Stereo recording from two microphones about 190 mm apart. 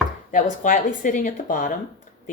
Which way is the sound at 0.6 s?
40° left (ahead or behind).